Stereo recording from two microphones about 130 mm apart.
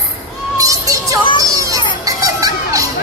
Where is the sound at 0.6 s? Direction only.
25° right (ahead or behind).